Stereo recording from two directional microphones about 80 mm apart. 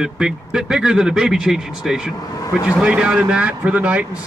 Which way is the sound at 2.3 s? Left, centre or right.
Left.